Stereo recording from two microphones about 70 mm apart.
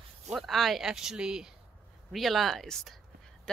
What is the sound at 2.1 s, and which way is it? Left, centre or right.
Speech, centre.